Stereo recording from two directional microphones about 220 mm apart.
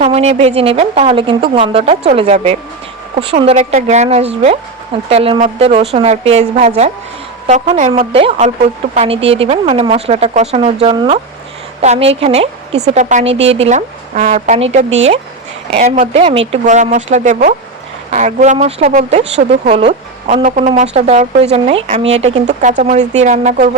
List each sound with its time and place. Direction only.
0.0 s a woman's voice: 30° right (ahead or behind)